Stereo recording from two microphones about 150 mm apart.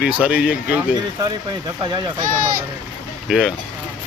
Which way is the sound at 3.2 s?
5° right (ahead or behind).